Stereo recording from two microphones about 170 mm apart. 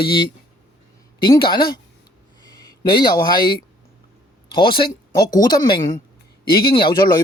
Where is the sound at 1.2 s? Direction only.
25° left (ahead or behind).